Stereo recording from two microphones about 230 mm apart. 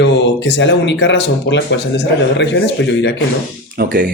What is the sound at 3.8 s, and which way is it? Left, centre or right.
Speech, right.